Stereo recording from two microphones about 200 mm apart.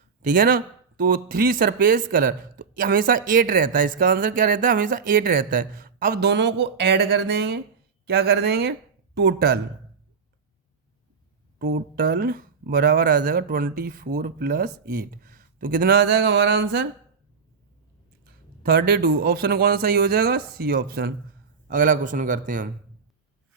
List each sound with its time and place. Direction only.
0.2 s speech: 40° right (ahead or behind)
11.6 s speech: 50° right (ahead or behind)
18.3 s a man's voice: 50° right (ahead or behind)